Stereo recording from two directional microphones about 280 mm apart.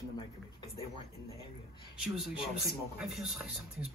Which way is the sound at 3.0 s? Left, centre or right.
Centre.